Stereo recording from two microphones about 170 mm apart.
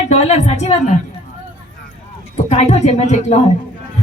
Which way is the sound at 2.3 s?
40° left (ahead or behind).